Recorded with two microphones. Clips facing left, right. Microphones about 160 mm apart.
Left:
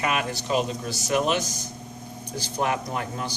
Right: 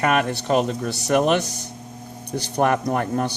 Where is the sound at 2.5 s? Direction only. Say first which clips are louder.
Right 7 dB; 55° right (ahead or behind).